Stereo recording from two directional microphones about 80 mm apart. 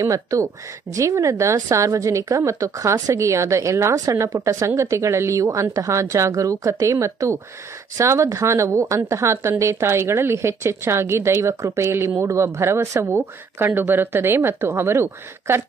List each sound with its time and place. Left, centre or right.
0.0 s a woman's voice: right